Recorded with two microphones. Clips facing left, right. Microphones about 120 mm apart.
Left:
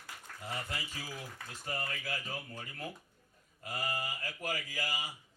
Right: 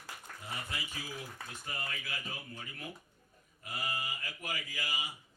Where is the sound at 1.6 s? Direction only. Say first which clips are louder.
Left 4 dB; 40° left (ahead or behind).